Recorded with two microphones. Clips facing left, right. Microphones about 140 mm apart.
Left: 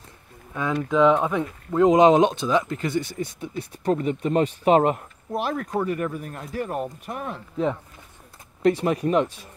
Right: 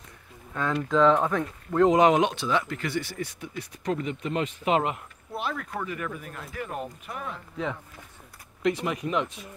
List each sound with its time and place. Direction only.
0.5 s speech: 10° left (ahead or behind)
1.9 s speech: 20° left (ahead or behind); by 7.3 s 45° left (ahead or behind)
8.8 s speech: 40° left (ahead or behind)